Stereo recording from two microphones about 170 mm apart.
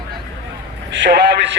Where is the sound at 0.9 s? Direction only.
85° right.